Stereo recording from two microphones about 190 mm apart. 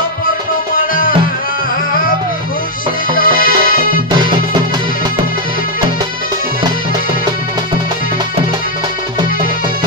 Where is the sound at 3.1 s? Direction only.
45° left (ahead or behind).